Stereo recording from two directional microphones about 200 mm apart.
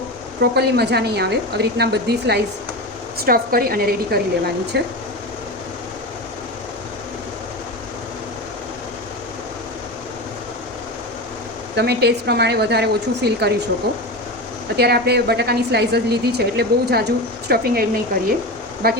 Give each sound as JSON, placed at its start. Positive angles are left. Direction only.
{"t": 0.5, "sound": "a woman's voice", "side_deg": -55}
{"t": 11.8, "sound": "a woman's voice", "side_deg": -55}